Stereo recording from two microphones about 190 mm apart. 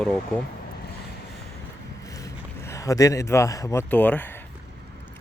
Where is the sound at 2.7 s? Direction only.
15° left (ahead or behind).